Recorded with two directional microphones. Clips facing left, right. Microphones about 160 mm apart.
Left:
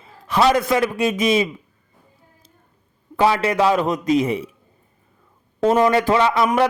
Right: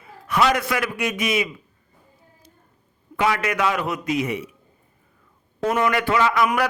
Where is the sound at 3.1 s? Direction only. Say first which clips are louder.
Left 5 dB; 30° left (ahead or behind).